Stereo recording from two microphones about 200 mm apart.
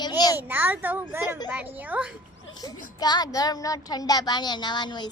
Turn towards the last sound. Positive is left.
turn(degrees=20)  # may be behind; listen again after turning